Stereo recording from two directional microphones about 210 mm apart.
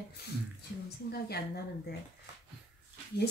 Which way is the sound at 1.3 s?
50° left (ahead or behind).